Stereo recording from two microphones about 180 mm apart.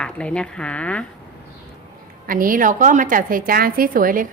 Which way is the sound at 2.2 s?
50° right (ahead or behind).